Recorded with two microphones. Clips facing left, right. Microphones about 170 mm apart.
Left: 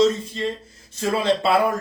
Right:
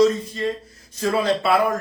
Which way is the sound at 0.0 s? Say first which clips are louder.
Right 1 dB; 25° left (ahead or behind).